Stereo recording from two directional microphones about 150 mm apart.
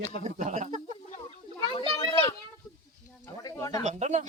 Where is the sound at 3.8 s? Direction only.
50° right (ahead or behind).